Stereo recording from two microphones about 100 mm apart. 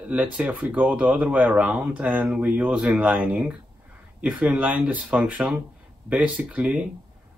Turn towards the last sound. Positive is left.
turn(degrees=-15)  # may be behind; listen again after turning